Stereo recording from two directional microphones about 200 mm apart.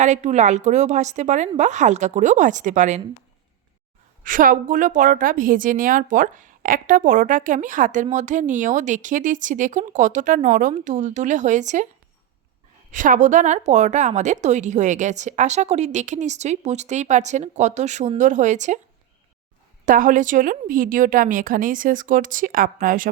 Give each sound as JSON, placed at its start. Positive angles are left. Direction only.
{"t": 0.0, "sound": "a woman's voice", "side_deg": -35}
{"t": 4.2, "sound": "a woman's voice", "side_deg": -45}
{"t": 12.9, "sound": "a woman's voice", "side_deg": -40}
{"t": 19.8, "sound": "a woman's voice", "side_deg": -40}